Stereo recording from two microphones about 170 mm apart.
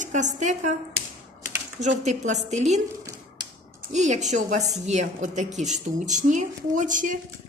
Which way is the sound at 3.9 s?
45° right (ahead or behind).